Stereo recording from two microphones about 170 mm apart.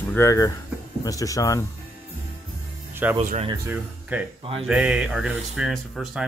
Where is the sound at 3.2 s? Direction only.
40° right (ahead or behind).